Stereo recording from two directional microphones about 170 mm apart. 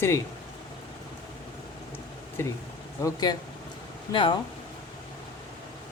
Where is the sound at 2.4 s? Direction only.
15° left (ahead or behind).